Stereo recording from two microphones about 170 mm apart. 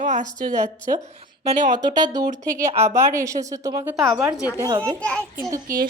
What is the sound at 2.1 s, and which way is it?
Speech, 20° right (ahead or behind).